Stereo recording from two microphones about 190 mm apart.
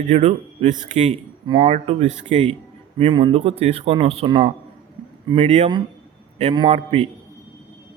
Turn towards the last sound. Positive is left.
turn(degrees=-30)  # may be behind; listen again after turning